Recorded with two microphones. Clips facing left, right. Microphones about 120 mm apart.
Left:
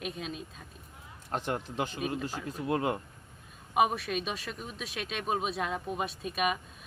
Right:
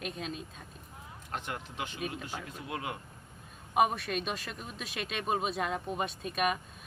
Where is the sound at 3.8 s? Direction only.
Centre (ahead or behind).